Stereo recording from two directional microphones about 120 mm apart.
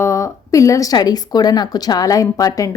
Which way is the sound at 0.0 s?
25° left (ahead or behind).